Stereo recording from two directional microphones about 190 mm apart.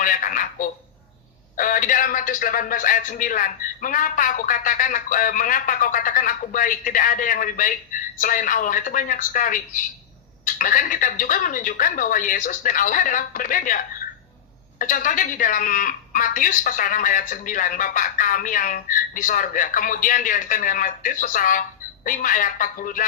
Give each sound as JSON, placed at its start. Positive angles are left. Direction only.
{"t": 0.0, "sound": "speech", "side_deg": 45}